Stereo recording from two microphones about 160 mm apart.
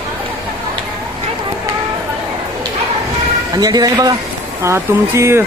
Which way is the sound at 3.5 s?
25° right (ahead or behind).